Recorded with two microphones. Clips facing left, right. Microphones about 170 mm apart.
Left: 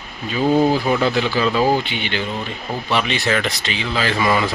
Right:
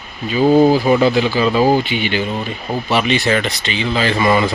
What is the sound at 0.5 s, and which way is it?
Speech, 5° right (ahead or behind).